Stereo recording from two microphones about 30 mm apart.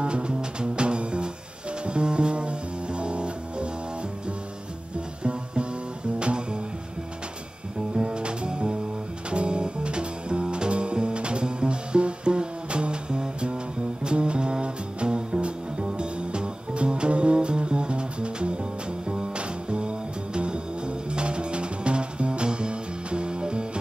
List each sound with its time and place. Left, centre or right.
0.0 s music: right
5.2 s music: right
7.9 s music: right